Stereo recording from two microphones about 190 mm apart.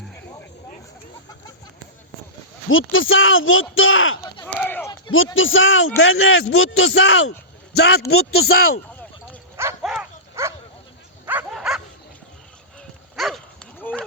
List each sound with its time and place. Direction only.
2.9 s speech: 90° left
4.4 s a sound: 10° left (ahead or behind)
5.1 s a man's voice: 90° left; by 8.7 s 55° left (ahead or behind)
9.8 s dog: centre (ahead or behind)
10.4 s bow-wow: 15° right (ahead or behind)
11.3 s dog: 5° right (ahead or behind)
13.1 s livestock: centre (ahead or behind)